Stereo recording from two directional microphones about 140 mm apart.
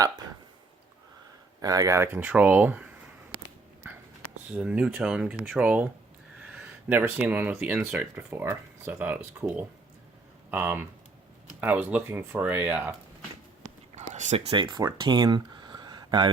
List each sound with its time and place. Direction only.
1.6 s speech: 25° right (ahead or behind)
2.1 s speech: 10° right (ahead or behind)
3.9 s a sound: 15° right (ahead or behind)
4.5 s speech: 10° right (ahead or behind)
6.4 s a sound: 10° right (ahead or behind)
7.6 s speech: 10° right (ahead or behind)
13.9 s speech: 55° right (ahead or behind); by 16.3 s 30° right (ahead or behind)